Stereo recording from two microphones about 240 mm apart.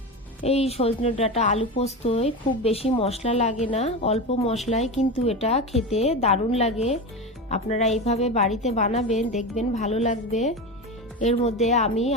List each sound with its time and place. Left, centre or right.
0.4 s speech: left